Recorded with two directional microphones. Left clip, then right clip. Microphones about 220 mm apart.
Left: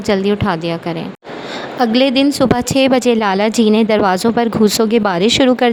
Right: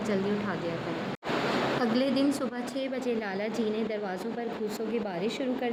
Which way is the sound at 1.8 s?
40° left (ahead or behind).